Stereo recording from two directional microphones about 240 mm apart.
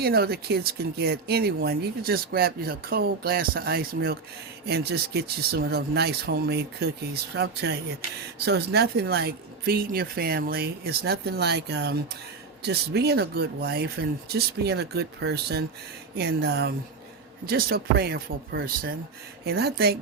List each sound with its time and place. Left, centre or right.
0.0 s speech: right